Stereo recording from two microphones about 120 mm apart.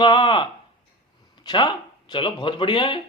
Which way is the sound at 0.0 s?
40° left (ahead or behind).